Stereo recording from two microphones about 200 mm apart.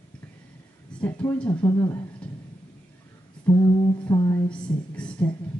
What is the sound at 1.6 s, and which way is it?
Speech, 15° left (ahead or behind).